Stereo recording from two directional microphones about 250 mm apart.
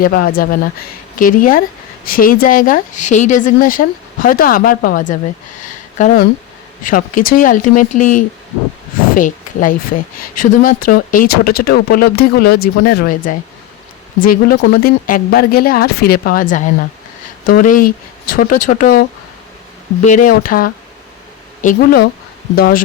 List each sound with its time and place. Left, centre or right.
0.0 s speech: left